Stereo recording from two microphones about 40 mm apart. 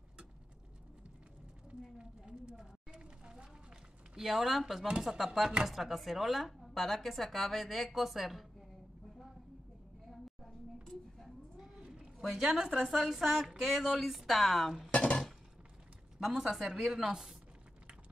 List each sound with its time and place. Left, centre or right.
1.8 s a sound: right
4.2 s a woman's voice: centre
10.4 s a sound: centre
12.2 s a woman's voice: centre
12.8 s a woman's voice: centre
14.9 s dishes: left
16.2 s speech: centre